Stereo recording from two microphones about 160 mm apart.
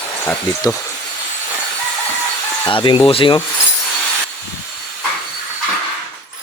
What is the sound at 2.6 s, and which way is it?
Speech, 30° left (ahead or behind).